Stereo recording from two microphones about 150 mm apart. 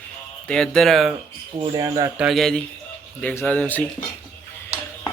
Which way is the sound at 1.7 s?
25° right (ahead or behind).